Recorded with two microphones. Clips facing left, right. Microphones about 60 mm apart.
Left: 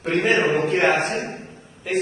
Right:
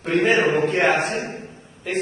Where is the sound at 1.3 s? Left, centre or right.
Centre.